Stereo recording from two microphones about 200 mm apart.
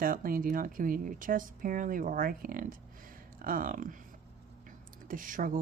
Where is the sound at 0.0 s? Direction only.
45° right (ahead or behind).